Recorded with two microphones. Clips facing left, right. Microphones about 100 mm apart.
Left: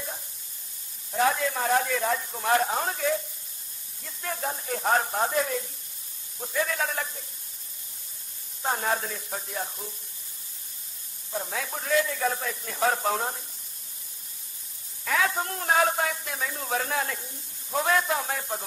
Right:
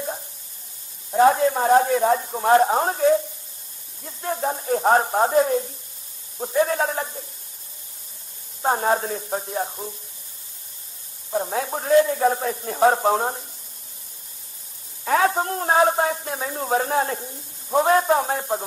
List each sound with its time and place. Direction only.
1.1 s a man's voice: 35° right (ahead or behind)
8.6 s a man's voice: 35° right (ahead or behind)
11.2 s a man's voice: 35° right (ahead or behind)
15.0 s a man's voice: 35° right (ahead or behind)